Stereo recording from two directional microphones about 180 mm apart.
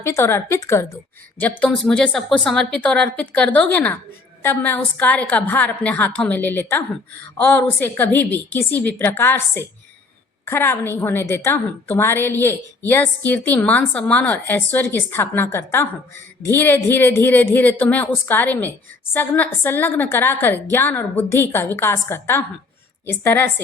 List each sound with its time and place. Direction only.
0.0 s a woman's voice: 15° left (ahead or behind)